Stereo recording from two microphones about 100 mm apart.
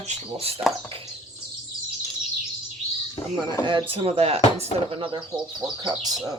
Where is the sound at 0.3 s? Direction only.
80° right.